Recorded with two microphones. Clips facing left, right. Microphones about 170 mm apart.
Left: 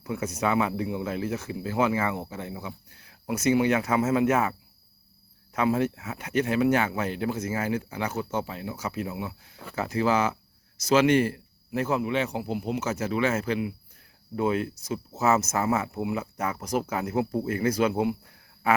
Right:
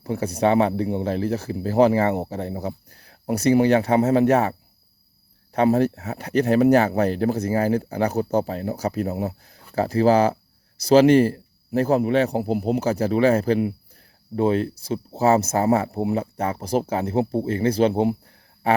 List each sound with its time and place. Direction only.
0.0 s speech: 35° right (ahead or behind)
5.5 s speech: 40° right (ahead or behind)
18.6 s a sound: 30° right (ahead or behind)